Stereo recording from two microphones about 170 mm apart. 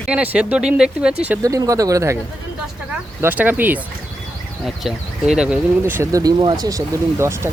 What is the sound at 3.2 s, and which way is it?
Speech, 10° right (ahead or behind).